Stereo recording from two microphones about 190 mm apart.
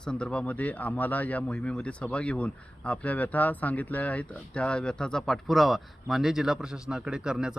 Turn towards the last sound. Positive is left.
turn(degrees=-5)  # may be behind; listen again after turning